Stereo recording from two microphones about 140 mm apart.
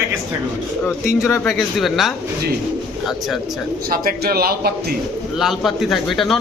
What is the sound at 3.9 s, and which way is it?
Speech, 90° right.